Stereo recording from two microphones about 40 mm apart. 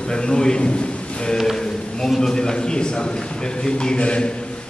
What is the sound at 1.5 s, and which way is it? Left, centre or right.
A man's voice, centre.